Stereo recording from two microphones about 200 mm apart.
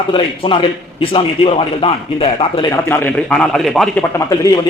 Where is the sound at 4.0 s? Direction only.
15° left (ahead or behind).